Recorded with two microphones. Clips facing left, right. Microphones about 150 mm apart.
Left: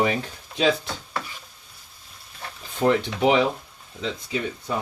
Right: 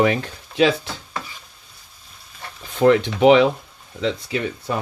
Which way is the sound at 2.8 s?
90° right.